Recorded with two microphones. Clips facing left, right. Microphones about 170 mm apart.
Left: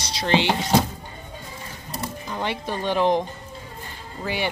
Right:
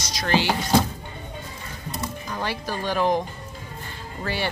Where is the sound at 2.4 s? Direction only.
20° left (ahead or behind).